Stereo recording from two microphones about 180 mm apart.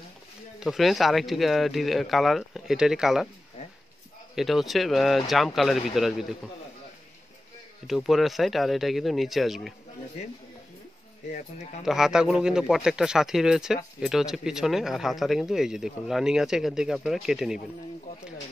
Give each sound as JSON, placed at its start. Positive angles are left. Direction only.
{"t": 0.6, "sound": "speech", "side_deg": 0}
{"t": 4.4, "sound": "speech", "side_deg": 0}
{"t": 7.8, "sound": "speech", "side_deg": 0}
{"t": 11.3, "sound": "speech", "side_deg": 40}
{"t": 11.8, "sound": "speech", "side_deg": 0}